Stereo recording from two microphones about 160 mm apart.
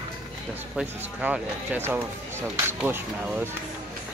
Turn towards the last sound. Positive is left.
turn(degrees=-10)  # may be behind; listen again after turning